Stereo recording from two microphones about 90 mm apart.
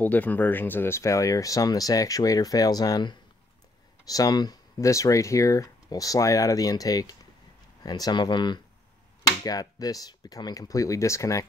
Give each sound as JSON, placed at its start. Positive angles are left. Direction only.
{"t": 0.0, "sound": "speech", "side_deg": 20}
{"t": 4.7, "sound": "speech", "side_deg": 35}
{"t": 9.4, "sound": "speech", "side_deg": 45}